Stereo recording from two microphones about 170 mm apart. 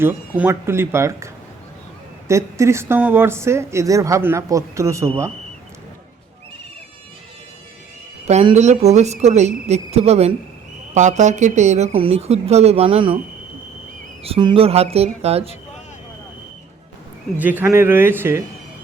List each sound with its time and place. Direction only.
0.0 s speech: 15° right (ahead or behind)
8.3 s speech: 40° right (ahead or behind)
14.3 s speech: 30° right (ahead or behind)
17.3 s speech: 10° right (ahead or behind)